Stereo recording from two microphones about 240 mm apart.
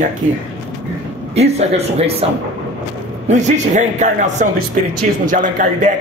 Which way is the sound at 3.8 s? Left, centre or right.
Right.